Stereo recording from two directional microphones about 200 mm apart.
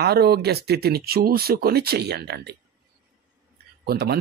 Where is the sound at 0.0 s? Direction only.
50° right (ahead or behind).